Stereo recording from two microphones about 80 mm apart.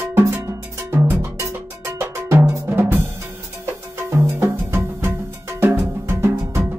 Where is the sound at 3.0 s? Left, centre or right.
Right.